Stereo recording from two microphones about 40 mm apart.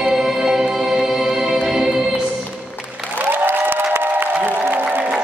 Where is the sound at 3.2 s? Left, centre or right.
Right.